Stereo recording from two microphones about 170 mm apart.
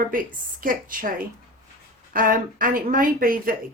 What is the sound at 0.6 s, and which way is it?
Speech, 55° right (ahead or behind).